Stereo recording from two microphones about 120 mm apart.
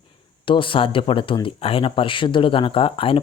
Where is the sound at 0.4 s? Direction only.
45° left (ahead or behind).